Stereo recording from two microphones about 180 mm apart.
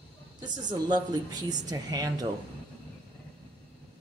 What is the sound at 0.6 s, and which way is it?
Speech, 25° right (ahead or behind).